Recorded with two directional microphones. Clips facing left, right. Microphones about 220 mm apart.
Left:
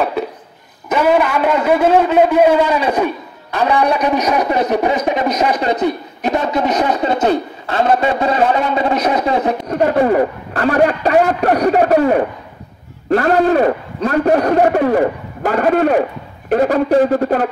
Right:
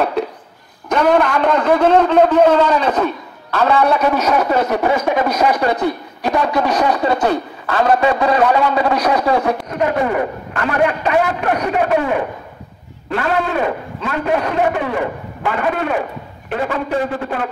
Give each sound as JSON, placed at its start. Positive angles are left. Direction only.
{"t": 0.8, "sound": "a man's voice", "side_deg": 5}
{"t": 9.7, "sound": "a man's voice", "side_deg": 35}